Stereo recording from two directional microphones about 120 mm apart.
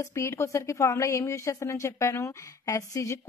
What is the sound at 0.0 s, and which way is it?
A woman's voice, 25° left (ahead or behind).